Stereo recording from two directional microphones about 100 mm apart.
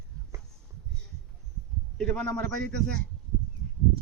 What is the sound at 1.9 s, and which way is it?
Speech, 5° left (ahead or behind).